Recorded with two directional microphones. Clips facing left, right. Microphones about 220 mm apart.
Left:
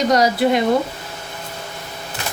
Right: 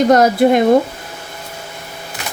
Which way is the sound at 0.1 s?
50° right (ahead or behind).